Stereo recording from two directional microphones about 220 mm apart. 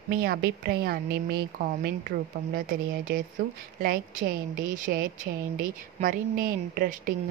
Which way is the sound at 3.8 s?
40° right (ahead or behind).